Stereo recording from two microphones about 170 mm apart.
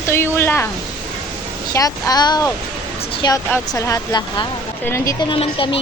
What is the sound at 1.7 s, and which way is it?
A woman's voice, 20° left (ahead or behind).